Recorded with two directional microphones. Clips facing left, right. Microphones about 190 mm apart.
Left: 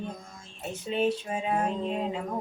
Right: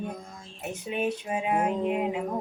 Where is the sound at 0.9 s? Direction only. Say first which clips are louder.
Left 2 dB; 15° right (ahead or behind).